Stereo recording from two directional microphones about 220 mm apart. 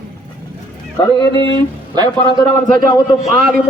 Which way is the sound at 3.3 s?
40° right (ahead or behind).